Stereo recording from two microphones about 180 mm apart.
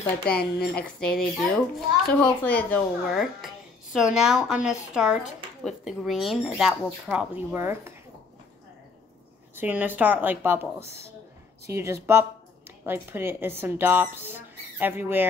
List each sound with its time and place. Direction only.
0.4 s speech: 60° left (ahead or behind)
0.9 s speech: 5° left (ahead or behind); by 7.9 s 15° right (ahead or behind)
9.6 s speech: 10° right (ahead or behind)